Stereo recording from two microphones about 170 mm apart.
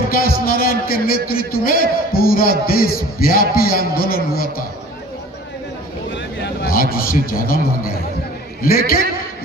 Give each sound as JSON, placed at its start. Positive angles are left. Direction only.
{"t": 0.1, "sound": "a man's voice", "side_deg": 60}
{"t": 6.1, "sound": "a sound", "side_deg": 90}
{"t": 8.6, "sound": "a man's voice", "side_deg": 60}